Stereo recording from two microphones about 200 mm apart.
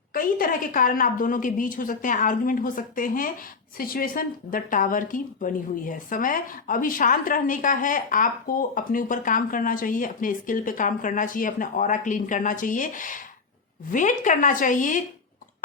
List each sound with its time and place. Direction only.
0.1 s a woman's voice: 45° left (ahead or behind)